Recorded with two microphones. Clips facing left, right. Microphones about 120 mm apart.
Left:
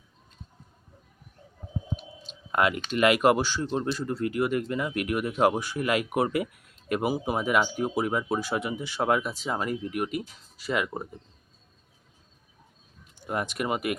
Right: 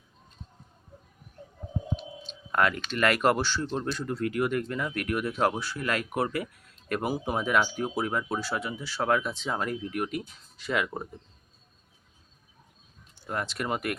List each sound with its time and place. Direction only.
2.5 s speech: 10° left (ahead or behind)
13.1 s speech: 15° left (ahead or behind)